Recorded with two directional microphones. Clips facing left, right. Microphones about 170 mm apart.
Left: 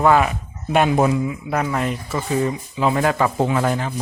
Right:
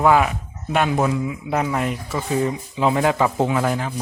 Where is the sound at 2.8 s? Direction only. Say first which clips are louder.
Even; 15° right (ahead or behind).